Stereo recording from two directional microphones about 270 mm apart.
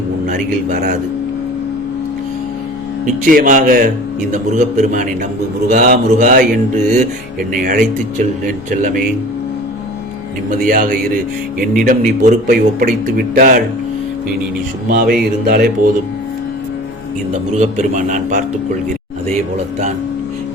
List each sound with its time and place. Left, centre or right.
0.3 s mantra: right
3.2 s a man's voice: right
4.3 s mantra: right
8.4 s a man's voice: right
10.5 s a man's voice: right
14.8 s a man's voice: right
17.5 s mantra: right